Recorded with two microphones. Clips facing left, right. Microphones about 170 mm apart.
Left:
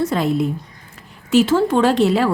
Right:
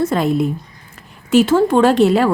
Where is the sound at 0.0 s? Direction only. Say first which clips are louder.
Right 2 dB; 50° right (ahead or behind).